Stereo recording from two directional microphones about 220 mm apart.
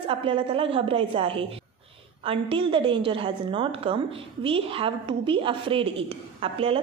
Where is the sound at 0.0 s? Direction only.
25° right (ahead or behind).